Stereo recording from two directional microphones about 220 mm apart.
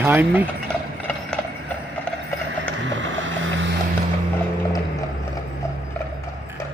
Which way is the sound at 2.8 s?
55° right (ahead or behind).